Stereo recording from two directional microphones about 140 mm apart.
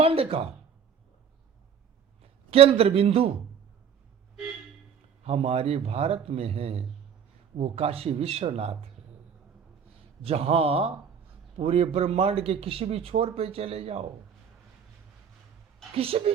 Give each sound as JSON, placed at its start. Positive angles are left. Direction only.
{"t": 0.0, "sound": "a man's voice", "side_deg": -45}
{"t": 2.5, "sound": "a man's voice", "side_deg": -45}
{"t": 5.2, "sound": "a man's voice", "side_deg": -45}
{"t": 10.2, "sound": "a man's voice", "side_deg": -45}
{"t": 16.0, "sound": "a man's voice", "side_deg": -45}